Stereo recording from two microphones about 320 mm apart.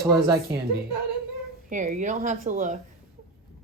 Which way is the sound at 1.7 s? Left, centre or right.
Right.